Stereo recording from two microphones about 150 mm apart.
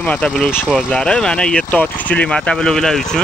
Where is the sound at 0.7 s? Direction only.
5° left (ahead or behind).